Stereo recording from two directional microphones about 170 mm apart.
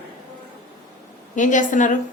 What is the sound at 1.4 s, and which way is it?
Speech, 50° left (ahead or behind).